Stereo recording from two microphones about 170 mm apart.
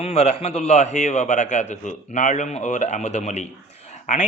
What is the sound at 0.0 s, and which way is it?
A man's voice, 40° left (ahead or behind).